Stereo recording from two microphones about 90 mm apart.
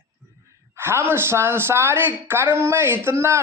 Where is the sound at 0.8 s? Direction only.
25° right (ahead or behind).